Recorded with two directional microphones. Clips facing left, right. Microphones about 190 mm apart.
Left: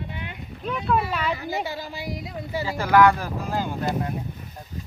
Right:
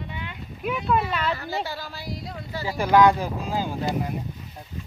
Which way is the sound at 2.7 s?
15° right (ahead or behind).